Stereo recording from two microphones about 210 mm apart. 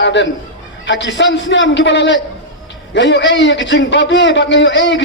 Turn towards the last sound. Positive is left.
turn(degrees=60)  # may be behind; listen again after turning